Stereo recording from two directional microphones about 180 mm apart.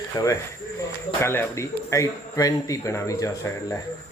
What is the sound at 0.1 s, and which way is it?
A man's voice, 20° left (ahead or behind).